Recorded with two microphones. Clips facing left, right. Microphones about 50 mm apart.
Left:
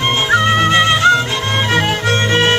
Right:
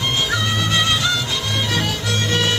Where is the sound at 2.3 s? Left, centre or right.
Left.